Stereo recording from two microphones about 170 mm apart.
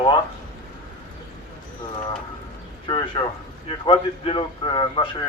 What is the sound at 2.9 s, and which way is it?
A man's voice, 25° left (ahead or behind).